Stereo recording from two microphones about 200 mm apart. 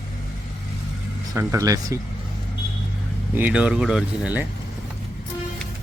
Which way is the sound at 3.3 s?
5° right (ahead or behind).